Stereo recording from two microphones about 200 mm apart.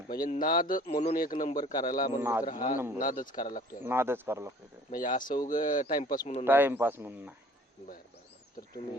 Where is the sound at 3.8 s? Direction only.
10° right (ahead or behind).